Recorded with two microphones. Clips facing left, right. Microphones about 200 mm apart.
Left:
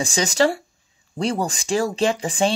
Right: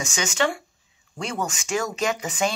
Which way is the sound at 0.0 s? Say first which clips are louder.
Left 5 dB; 35° left (ahead or behind).